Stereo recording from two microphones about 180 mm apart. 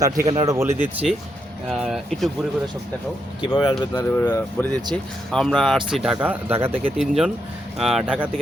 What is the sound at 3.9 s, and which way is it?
Speech, 15° left (ahead or behind).